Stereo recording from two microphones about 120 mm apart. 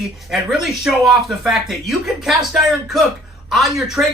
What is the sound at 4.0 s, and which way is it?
Speech, 20° right (ahead or behind).